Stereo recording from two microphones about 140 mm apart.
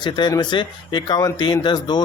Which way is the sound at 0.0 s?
30° left (ahead or behind).